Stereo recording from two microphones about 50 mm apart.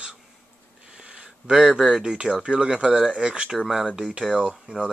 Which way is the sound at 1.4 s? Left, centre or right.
Centre.